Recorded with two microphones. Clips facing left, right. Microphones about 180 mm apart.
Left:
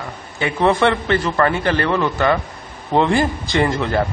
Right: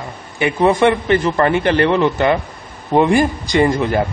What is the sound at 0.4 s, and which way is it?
A man's voice, 15° right (ahead or behind).